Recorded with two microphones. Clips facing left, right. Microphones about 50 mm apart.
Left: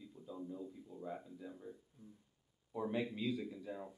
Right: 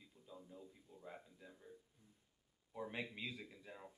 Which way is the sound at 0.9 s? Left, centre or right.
Right.